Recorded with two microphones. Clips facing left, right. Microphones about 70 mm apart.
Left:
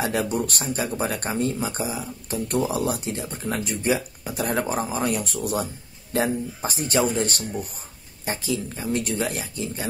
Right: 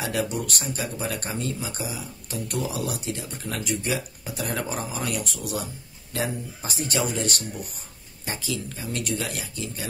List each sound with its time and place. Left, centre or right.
0.0 s speech: left